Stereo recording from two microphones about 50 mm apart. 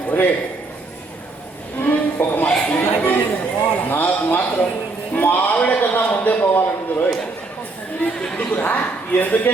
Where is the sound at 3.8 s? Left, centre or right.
Left.